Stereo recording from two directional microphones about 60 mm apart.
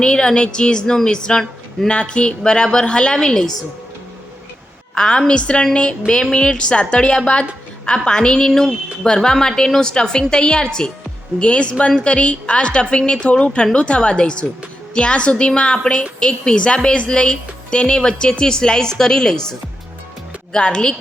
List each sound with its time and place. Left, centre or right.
0.0 s a woman's voice: centre
4.9 s a woman's voice: centre